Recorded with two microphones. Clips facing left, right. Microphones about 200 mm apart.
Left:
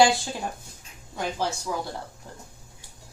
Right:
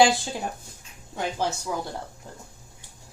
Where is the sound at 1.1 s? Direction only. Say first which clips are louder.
Right 1 dB; 15° right (ahead or behind).